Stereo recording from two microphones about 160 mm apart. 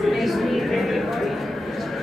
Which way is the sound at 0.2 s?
Centre (ahead or behind).